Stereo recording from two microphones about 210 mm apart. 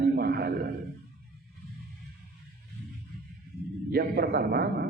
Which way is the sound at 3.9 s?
45° right (ahead or behind).